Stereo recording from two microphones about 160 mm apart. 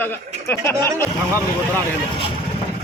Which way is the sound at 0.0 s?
15° left (ahead or behind).